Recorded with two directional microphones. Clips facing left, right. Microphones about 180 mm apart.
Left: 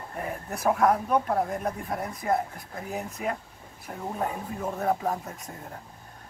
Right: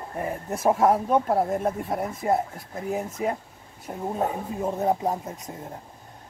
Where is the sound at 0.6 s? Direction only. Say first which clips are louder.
Right 3 dB; 25° right (ahead or behind).